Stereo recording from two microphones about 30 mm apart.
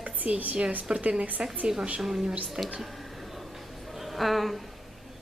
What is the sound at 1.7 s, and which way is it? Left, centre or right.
Speech, centre.